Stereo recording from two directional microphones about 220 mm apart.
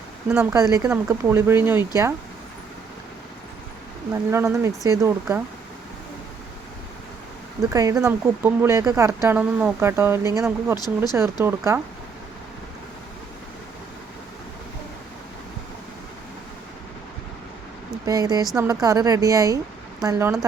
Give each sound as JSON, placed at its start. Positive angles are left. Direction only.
{"t": 0.3, "sound": "speech", "side_deg": -15}
{"t": 4.1, "sound": "speech", "side_deg": -10}
{"t": 7.7, "sound": "speech", "side_deg": -15}
{"t": 10.8, "sound": "speech", "side_deg": 15}
{"t": 11.1, "sound": "speech", "side_deg": -15}
{"t": 18.0, "sound": "speech", "side_deg": -15}